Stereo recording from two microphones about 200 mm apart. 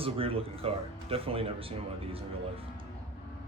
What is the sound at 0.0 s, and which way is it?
Speech, 30° right (ahead or behind).